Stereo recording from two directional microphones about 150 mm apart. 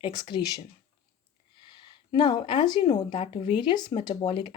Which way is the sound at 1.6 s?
30° left (ahead or behind).